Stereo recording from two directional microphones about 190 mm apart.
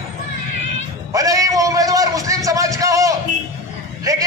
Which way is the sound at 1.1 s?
20° right (ahead or behind).